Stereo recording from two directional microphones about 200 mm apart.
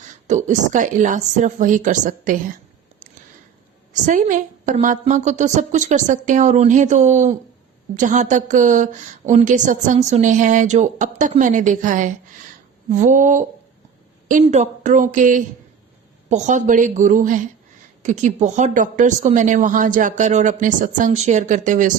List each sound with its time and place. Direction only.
0.0 s speech: 35° right (ahead or behind)
4.0 s speech: 40° right (ahead or behind)